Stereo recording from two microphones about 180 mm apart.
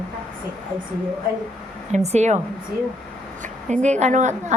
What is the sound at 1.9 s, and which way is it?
Speech, 40° right (ahead or behind).